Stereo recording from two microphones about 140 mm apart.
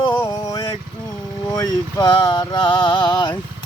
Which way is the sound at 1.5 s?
30° left (ahead or behind).